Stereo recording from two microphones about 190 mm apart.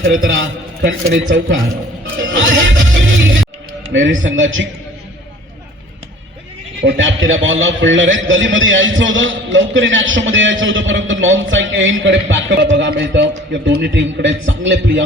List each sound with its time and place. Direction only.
0.0 s a man's voice: 80° right
2.1 s music: 80° right
3.9 s a man's voice: 80° right
6.8 s a man's voice: 75° right (ahead or behind)